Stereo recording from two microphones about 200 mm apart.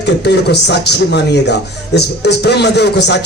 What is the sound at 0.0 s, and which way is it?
Speech, 55° left (ahead or behind).